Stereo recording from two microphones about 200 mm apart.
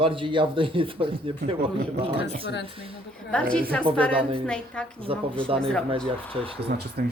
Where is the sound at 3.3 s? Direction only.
5° left (ahead or behind).